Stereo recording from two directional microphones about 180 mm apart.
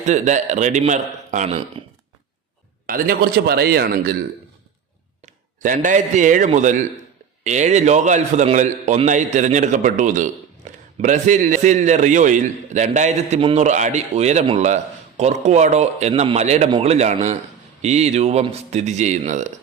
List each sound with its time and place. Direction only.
0.0 s a man's voice: 40° right (ahead or behind)
2.8 s a man's voice: 55° right (ahead or behind)
5.2 s a man's voice: 45° right (ahead or behind)
10.6 s a sound: 40° right (ahead or behind)
11.0 s a man's voice: 45° right (ahead or behind)